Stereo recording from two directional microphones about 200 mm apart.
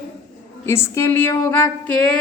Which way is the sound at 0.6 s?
10° left (ahead or behind).